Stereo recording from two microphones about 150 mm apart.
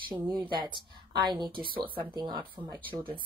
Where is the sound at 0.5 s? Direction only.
30° right (ahead or behind).